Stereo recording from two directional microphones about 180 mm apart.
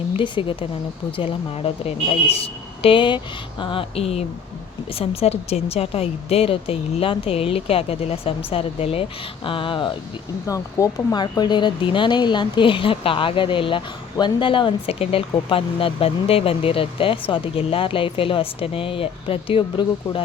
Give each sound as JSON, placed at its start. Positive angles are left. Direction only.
{"t": 0.1, "sound": "speech", "side_deg": 30}